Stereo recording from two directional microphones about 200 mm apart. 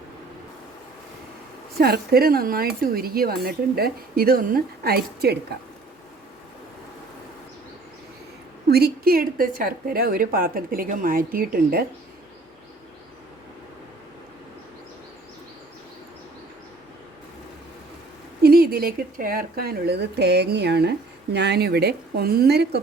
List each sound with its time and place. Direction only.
1.8 s speech: 50° right (ahead or behind)
8.7 s speech: 50° right (ahead or behind)
18.4 s speech: 50° right (ahead or behind)